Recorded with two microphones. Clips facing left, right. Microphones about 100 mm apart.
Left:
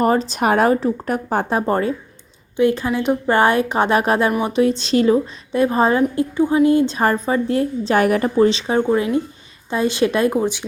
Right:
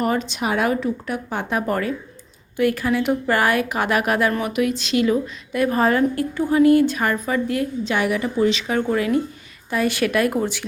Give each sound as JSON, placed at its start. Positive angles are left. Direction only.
{"t": 0.0, "sound": "speech", "side_deg": 35}
{"t": 7.9, "sound": "a woman's voice", "side_deg": 45}
{"t": 8.4, "sound": "speech", "side_deg": 30}